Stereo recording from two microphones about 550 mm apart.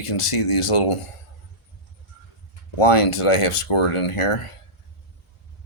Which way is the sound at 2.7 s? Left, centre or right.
Left.